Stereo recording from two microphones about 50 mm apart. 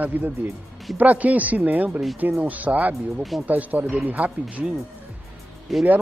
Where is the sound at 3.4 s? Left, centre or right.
Right.